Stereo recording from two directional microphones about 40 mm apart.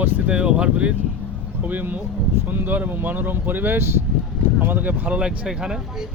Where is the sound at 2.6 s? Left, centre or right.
Right.